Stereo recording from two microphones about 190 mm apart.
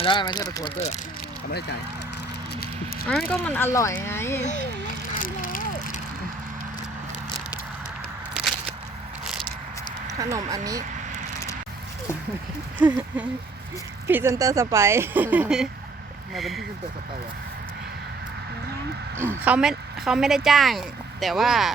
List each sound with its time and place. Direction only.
0.0 s speech: 25° left (ahead or behind)
3.1 s speech: 5° left (ahead or behind)
5.2 s vehicle: 45° left (ahead or behind)
10.1 s speech: 15° right (ahead or behind)
12.8 s speech: 5° right (ahead or behind)
19.4 s speech: 5° right (ahead or behind)